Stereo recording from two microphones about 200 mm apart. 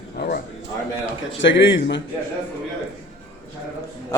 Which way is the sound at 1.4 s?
65° left (ahead or behind).